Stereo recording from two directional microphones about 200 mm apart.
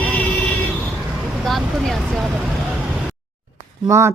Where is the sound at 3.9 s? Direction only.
15° right (ahead or behind).